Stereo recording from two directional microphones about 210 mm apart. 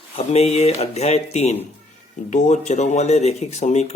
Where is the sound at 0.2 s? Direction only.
30° left (ahead or behind).